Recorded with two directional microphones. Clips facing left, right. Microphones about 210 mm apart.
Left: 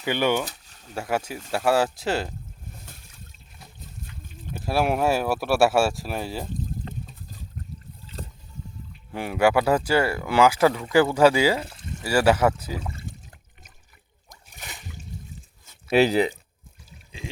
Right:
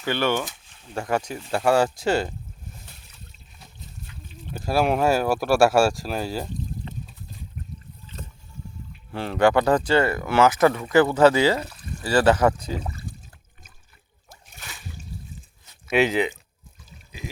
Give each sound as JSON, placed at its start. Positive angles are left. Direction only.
{"t": 0.0, "sound": "speech", "side_deg": 15}
{"t": 0.4, "sound": "a sound", "side_deg": 40}
{"t": 0.9, "sound": "speech", "side_deg": 5}
{"t": 2.8, "sound": "a sound", "side_deg": 50}
{"t": 4.5, "sound": "speech", "side_deg": 0}
{"t": 9.1, "sound": "speech", "side_deg": 10}
{"t": 11.7, "sound": "pour", "side_deg": 25}
{"t": 12.0, "sound": "speech", "side_deg": 10}
{"t": 12.9, "sound": "a sound", "side_deg": 25}
{"t": 14.5, "sound": "splash", "side_deg": 20}
{"t": 15.9, "sound": "speech", "side_deg": 35}